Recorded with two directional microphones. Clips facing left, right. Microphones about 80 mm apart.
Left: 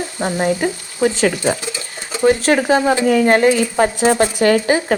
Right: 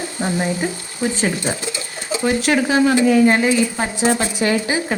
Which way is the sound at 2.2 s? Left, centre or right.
Left.